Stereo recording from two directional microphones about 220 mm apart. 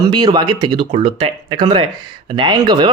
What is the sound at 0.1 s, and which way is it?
Speech, 20° right (ahead or behind).